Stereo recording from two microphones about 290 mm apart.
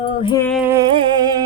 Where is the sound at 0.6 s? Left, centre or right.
Centre.